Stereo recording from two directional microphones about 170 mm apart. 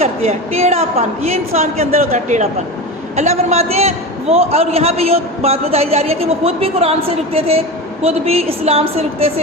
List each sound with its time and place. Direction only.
0.0 s a man's voice: 40° right (ahead or behind)